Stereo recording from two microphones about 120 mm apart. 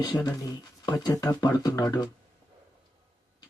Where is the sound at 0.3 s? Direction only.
35° left (ahead or behind).